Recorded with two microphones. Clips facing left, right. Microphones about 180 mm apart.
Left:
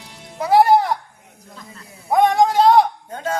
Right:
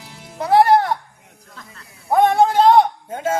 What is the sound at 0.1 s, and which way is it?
Music, centre (ahead or behind).